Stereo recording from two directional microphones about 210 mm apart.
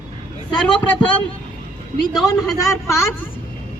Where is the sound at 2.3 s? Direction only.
15° left (ahead or behind).